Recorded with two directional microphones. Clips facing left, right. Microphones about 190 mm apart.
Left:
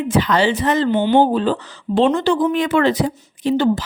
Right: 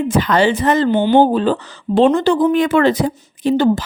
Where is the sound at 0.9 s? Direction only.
35° right (ahead or behind).